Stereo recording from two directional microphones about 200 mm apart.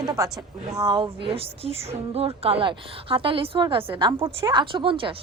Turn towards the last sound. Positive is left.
turn(degrees=-25)  # may be behind; listen again after turning